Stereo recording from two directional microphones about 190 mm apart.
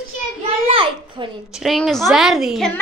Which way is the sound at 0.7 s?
25° right (ahead or behind).